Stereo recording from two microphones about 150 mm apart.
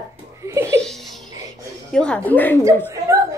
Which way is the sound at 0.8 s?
Centre (ahead or behind).